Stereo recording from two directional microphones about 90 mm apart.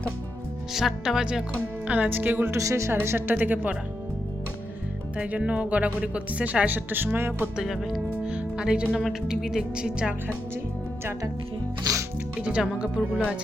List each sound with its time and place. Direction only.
0.7 s speech: 5° right (ahead or behind)
1.9 s speech: 20° right (ahead or behind)
2.6 s speech: 35° right (ahead or behind)
5.1 s speech: 10° right (ahead or behind)
7.5 s speech: 5° right (ahead or behind)
12.4 s speech: 10° right (ahead or behind)